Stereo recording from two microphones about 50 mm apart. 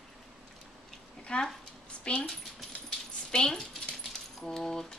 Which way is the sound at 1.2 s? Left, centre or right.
Centre.